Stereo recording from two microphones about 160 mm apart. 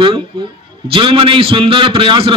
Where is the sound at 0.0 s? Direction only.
30° right (ahead or behind).